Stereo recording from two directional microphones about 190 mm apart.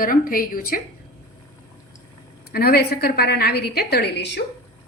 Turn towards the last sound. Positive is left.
turn(degrees=65)  # may be behind; listen again after turning